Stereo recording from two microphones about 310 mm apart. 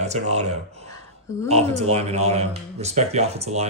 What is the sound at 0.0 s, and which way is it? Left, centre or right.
Speech, right.